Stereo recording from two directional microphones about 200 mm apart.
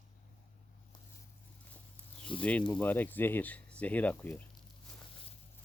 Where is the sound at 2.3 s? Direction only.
25° left (ahead or behind).